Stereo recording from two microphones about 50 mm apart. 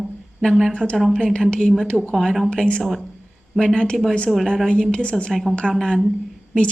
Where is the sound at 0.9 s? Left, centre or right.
Centre.